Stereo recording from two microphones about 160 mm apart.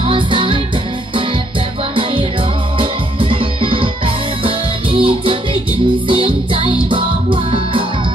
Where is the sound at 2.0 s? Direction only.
35° right (ahead or behind).